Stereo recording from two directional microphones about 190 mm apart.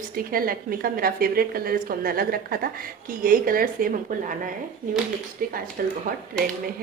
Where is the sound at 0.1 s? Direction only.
50° right (ahead or behind).